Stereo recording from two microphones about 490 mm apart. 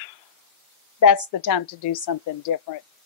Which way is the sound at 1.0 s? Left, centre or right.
Left.